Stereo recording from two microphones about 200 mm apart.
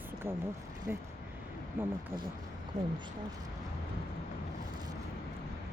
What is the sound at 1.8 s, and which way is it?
Speech, 10° right (ahead or behind).